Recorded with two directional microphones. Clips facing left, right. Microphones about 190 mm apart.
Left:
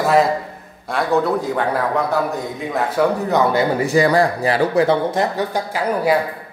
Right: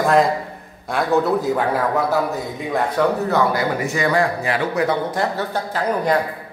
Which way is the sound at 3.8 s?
35° left (ahead or behind).